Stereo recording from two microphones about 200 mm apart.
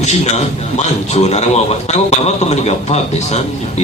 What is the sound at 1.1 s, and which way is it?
A man's voice, 30° left (ahead or behind).